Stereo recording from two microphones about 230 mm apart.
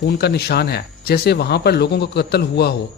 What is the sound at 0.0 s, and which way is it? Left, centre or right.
A man's voice, left.